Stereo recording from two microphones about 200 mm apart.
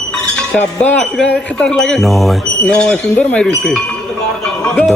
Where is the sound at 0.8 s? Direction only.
5° left (ahead or behind).